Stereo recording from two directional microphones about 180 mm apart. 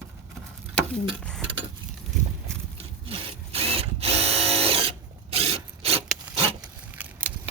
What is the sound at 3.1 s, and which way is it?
Drill, 35° right (ahead or behind).